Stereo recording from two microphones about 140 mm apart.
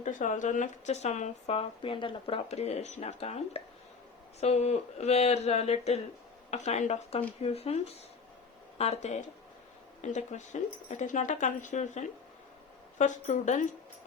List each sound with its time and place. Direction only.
0.0 s speech: 65° left (ahead or behind)